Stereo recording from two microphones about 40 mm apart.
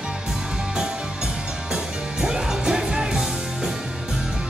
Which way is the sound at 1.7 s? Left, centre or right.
Centre.